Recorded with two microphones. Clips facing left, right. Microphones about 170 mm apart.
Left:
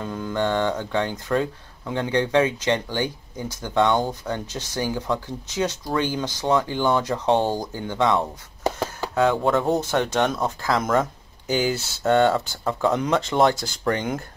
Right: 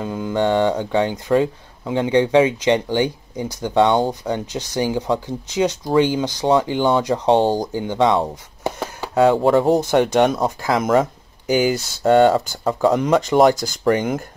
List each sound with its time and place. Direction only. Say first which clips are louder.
0.0 s speech: right 5 dB; 15° right (ahead or behind)
9.3 s speech: right 6 dB; 30° right (ahead or behind)
9.8 s speech: right 6 dB; 15° right (ahead or behind)